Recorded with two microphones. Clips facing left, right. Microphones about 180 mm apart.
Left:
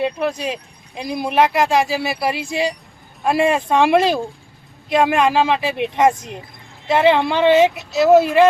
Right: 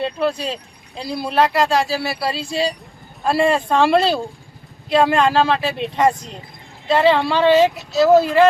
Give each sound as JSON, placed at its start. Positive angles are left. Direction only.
{"t": 0.0, "sound": "speech", "side_deg": 15}